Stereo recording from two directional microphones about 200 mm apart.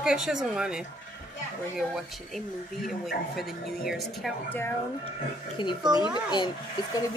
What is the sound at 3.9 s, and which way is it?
Speech, centre (ahead or behind).